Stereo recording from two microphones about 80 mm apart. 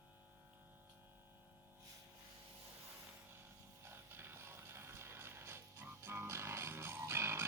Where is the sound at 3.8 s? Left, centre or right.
Right.